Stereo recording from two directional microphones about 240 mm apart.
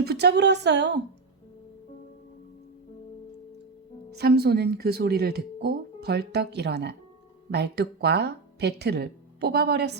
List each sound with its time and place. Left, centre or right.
0.0 s speech: right
4.1 s speech: right